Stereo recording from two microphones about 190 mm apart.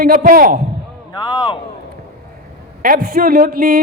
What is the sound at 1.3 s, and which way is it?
Speech, 25° left (ahead or behind).